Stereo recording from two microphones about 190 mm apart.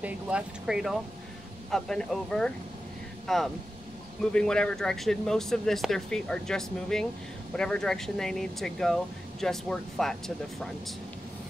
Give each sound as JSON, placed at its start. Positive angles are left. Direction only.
{"t": 0.0, "sound": "speech", "side_deg": -5}